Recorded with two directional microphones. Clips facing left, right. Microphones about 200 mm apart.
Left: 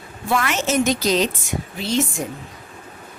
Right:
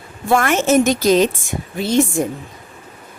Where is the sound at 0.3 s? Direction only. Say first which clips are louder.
Right 6 dB; 50° right (ahead or behind).